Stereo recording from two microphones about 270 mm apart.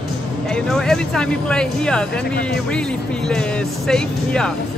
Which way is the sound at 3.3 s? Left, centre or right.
Centre.